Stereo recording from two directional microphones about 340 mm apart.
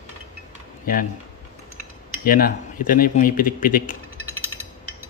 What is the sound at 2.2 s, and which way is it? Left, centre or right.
Speech, left.